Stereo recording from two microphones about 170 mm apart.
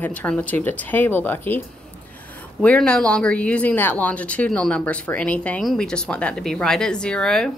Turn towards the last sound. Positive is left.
turn(degrees=5)  # may be behind; listen again after turning